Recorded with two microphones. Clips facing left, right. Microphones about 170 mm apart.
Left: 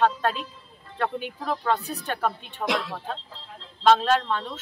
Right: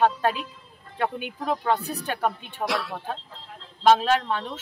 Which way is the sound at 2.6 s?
20° left (ahead or behind).